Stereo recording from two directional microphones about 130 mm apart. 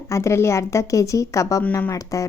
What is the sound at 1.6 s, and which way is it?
Speech, 10° left (ahead or behind).